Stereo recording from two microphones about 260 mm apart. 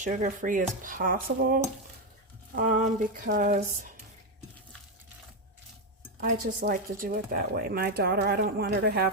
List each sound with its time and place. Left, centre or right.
0.0 s speech: right
6.1 s speech: right